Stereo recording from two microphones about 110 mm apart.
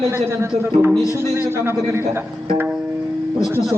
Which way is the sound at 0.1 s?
25° right (ahead or behind).